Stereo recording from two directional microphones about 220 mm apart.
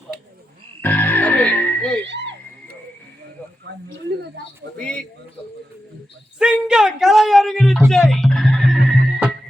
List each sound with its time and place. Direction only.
0.8 s music: 10° left (ahead or behind)
2.0 s music: 55° right (ahead or behind)
3.9 s a sound: 50° right (ahead or behind)
4.8 s a man's voice: 5° left (ahead or behind)
6.4 s a sound: 5° right (ahead or behind)
7.8 s music: centre (ahead or behind)